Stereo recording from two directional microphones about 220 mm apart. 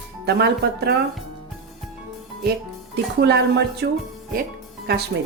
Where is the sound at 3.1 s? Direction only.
50° right (ahead or behind).